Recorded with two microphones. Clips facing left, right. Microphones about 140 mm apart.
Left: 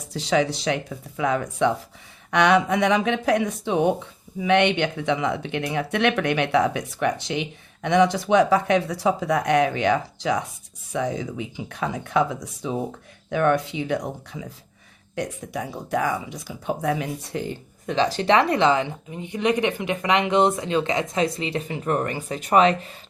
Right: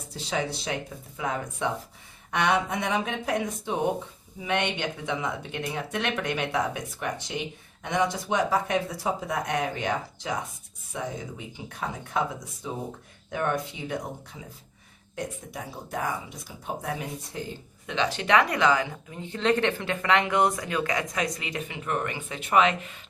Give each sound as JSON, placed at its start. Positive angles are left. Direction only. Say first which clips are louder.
{"t": 0.1, "sound": "speech", "louder": "left 8 dB", "side_deg": 90}
{"t": 4.4, "sound": "speech", "louder": "left 8 dB", "side_deg": 75}
{"t": 15.1, "sound": "speech", "louder": "left 6 dB", "side_deg": 75}
{"t": 17.8, "sound": "a woman's voice", "louder": "left 6 dB", "side_deg": 35}